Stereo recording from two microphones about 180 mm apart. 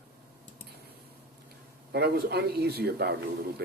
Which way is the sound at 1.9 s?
60° right (ahead or behind).